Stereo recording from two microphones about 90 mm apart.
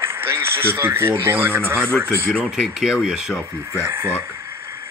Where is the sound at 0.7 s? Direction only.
25° right (ahead or behind).